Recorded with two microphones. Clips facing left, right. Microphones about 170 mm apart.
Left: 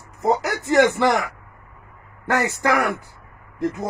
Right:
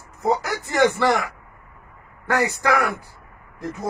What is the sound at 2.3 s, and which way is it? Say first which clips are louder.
Speech: even; 20° left (ahead or behind).